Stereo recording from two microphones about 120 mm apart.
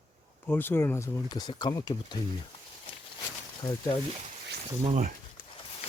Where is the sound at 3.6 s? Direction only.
40° left (ahead or behind).